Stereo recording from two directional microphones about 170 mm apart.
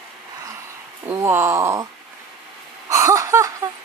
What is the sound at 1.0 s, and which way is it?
Speech, 15° right (ahead or behind).